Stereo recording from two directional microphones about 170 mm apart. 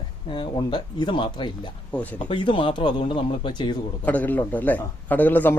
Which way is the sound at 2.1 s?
30° left (ahead or behind).